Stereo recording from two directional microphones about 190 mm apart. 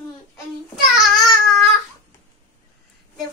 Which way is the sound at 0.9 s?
Centre (ahead or behind).